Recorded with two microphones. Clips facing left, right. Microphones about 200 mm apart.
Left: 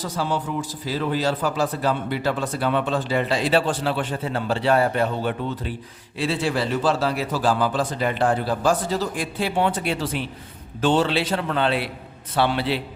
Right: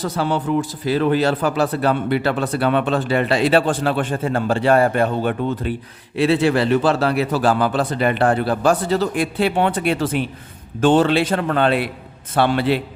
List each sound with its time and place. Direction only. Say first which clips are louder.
0.0 s a man's voice: right 5 dB; 65° right (ahead or behind)